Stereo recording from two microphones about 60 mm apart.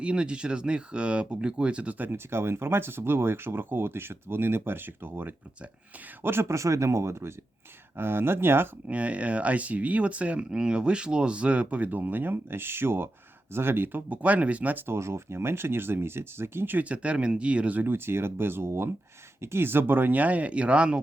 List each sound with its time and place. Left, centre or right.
0.0 s speech: centre
2.0 s speech: right
6.2 s speech: right
8.9 s speech: right
14.1 s speech: right
14.8 s speech: right
17.8 s speech: right; by 21.0 s centre